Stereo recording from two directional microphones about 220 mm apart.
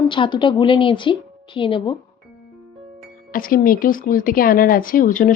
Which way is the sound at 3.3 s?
40° left (ahead or behind).